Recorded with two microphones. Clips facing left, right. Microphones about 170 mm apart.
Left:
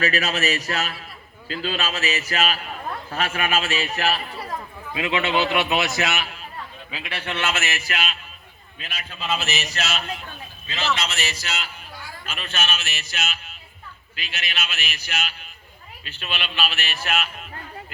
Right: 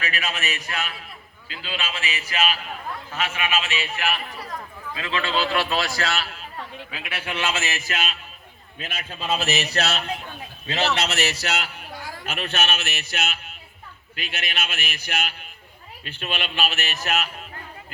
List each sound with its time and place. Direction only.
0.0 s a man's voice: 40° left (ahead or behind)
4.9 s a man's voice: 20° left (ahead or behind)
6.9 s a man's voice: 5° right (ahead or behind)
8.8 s a man's voice: 50° right (ahead or behind)